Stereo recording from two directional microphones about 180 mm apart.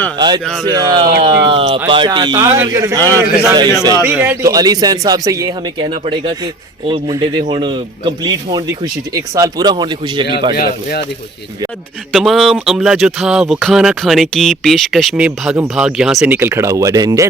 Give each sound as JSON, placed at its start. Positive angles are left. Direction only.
{"t": 0.6, "sound": "speech", "side_deg": -20}
{"t": 4.4, "sound": "speech", "side_deg": -20}
{"t": 12.1, "sound": "speech", "side_deg": 0}